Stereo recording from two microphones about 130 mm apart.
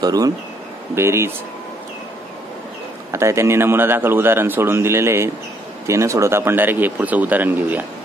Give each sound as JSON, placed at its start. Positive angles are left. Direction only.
{"t": 0.0, "sound": "a man's voice", "side_deg": -30}
{"t": 3.1, "sound": "a man's voice", "side_deg": -20}